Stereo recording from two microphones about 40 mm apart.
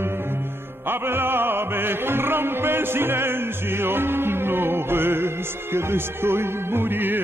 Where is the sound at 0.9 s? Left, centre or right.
Right.